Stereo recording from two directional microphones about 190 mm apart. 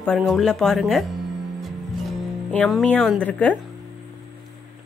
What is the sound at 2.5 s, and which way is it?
Speech, 5° left (ahead or behind).